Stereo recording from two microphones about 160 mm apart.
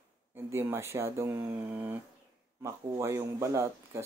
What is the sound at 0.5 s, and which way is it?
Speech, 15° right (ahead or behind).